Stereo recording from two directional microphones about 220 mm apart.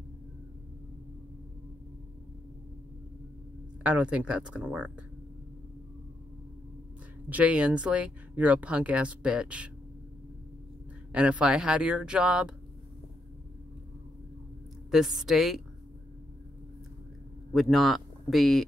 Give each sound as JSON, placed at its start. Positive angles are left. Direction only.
{"t": 3.8, "sound": "speech", "side_deg": -5}
{"t": 7.2, "sound": "speech", "side_deg": -5}
{"t": 11.1, "sound": "speech", "side_deg": -5}
{"t": 14.9, "sound": "speech", "side_deg": 0}
{"t": 17.5, "sound": "a man's voice", "side_deg": 0}